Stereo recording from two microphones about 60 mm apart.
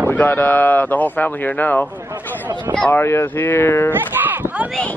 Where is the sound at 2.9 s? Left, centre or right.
Left.